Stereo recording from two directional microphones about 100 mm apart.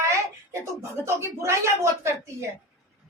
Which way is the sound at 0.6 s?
30° right (ahead or behind).